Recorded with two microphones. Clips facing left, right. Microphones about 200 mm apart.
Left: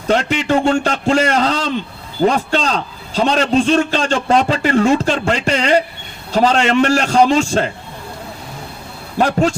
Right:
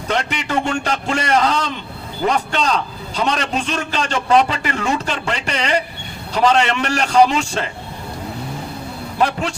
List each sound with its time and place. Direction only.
0.1 s a man's voice: 35° left (ahead or behind)
9.1 s a man's voice: 40° left (ahead or behind)